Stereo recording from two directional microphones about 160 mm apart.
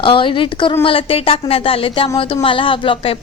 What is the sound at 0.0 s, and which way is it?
A woman's voice, 30° left (ahead or behind).